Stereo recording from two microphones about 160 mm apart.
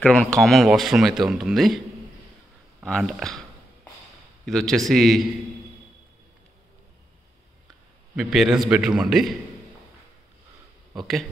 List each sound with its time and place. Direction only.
0.0 s speech: 5° left (ahead or behind)
2.8 s speech: 5° left (ahead or behind)
4.5 s speech: centre (ahead or behind)
8.2 s speech: 5° right (ahead or behind)
11.0 s speech: centre (ahead or behind)